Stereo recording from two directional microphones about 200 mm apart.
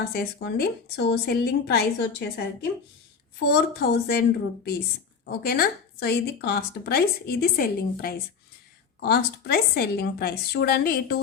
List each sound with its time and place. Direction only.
0.0 s speech: 55° left (ahead or behind)